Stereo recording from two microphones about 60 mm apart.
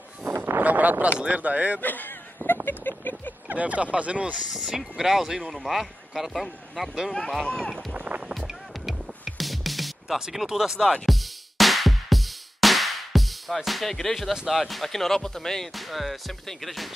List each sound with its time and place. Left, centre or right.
0.3 s a sound: right
0.6 s a sound: right
1.2 s speech: right
1.8 s a man's voice: left
2.4 s a sound: left
3.4 s speech: right
4.5 s speech: centre
7.9 s music: right
8.4 s music: centre
14.3 s speech: centre